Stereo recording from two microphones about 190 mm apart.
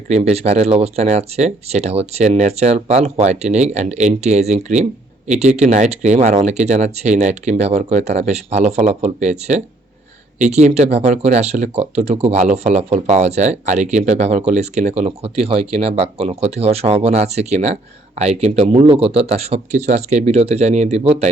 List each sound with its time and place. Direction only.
0.1 s speech: 35° right (ahead or behind)